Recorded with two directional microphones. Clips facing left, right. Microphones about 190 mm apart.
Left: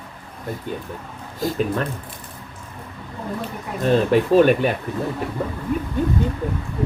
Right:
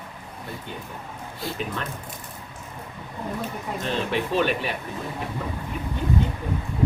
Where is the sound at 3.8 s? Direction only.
45° left (ahead or behind).